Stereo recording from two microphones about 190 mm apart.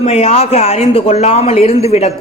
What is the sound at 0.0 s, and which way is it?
A man's voice, 35° left (ahead or behind).